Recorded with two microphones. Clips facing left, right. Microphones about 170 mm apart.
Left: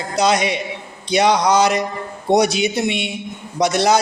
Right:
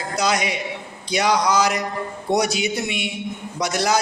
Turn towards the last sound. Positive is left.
turn(degrees=25)  # may be behind; listen again after turning